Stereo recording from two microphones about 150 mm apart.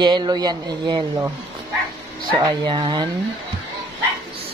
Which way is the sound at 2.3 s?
30° right (ahead or behind).